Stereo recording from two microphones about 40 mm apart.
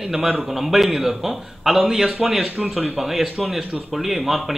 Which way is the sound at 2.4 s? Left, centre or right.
Right.